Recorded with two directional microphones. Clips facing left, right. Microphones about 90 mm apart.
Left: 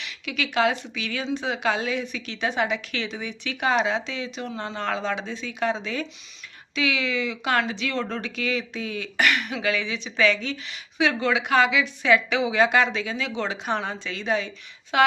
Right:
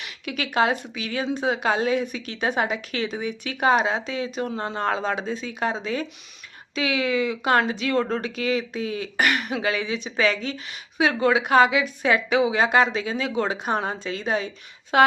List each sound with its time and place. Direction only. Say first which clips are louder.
0.0 s speech: even; 40° right (ahead or behind)
1.2 s speech: right 2 dB; 45° right (ahead or behind)